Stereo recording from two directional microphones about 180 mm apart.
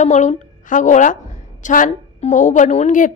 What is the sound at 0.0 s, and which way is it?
A woman's voice, 40° left (ahead or behind).